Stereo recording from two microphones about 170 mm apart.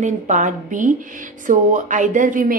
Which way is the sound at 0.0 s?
45° right (ahead or behind).